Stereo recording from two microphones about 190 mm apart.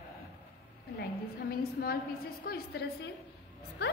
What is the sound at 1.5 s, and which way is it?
A woman's voice, 50° left (ahead or behind).